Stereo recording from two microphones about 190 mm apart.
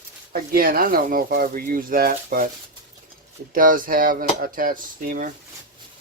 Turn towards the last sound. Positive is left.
turn(degrees=-45)  # may be behind; listen again after turning